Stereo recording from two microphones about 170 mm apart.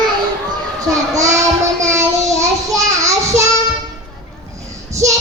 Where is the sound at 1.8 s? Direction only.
15° right (ahead or behind).